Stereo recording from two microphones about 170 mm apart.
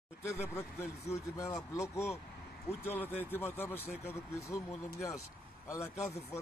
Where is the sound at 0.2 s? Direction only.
15° left (ahead or behind).